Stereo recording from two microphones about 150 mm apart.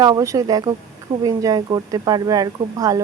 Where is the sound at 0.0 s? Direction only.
25° right (ahead or behind).